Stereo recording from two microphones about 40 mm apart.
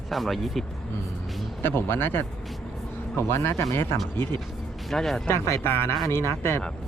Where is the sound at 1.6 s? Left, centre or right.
Left.